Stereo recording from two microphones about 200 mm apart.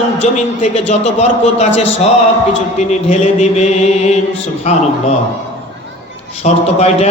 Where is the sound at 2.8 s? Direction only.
35° left (ahead or behind).